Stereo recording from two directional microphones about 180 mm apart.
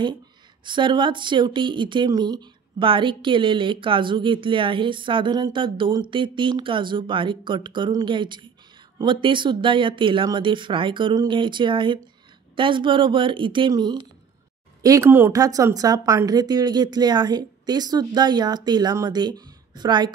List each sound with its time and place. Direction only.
0.7 s speech: 25° right (ahead or behind)